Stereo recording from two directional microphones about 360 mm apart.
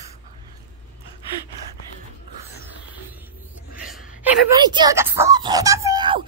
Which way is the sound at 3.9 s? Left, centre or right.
Centre.